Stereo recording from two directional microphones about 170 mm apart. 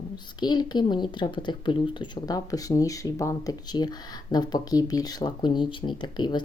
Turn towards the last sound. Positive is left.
turn(degrees=25)  # may be behind; listen again after turning